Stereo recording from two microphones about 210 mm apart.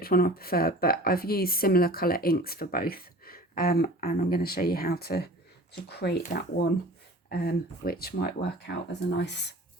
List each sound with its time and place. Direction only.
0.0 s a woman's voice: 45° left (ahead or behind)